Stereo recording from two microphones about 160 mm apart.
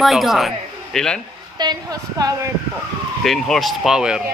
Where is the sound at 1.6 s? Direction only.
25° right (ahead or behind).